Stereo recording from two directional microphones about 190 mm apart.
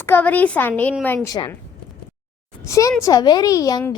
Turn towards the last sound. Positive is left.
turn(degrees=20)  # may be behind; listen again after turning